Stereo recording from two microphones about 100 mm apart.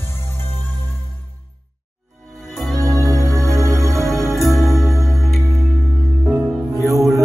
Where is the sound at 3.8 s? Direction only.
Centre (ahead or behind).